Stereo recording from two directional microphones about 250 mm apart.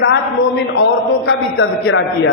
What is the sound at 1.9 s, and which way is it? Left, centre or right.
Speech, left.